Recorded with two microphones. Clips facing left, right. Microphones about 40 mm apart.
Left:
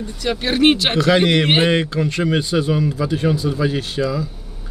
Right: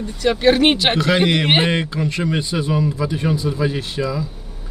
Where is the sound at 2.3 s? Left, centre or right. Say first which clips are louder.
Left 2 dB; centre.